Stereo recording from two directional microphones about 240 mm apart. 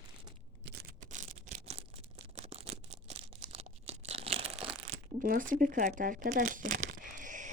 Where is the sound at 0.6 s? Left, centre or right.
Right.